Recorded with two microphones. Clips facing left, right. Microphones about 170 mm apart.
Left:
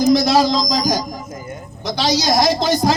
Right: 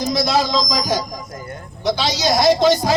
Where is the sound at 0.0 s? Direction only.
40° left (ahead or behind).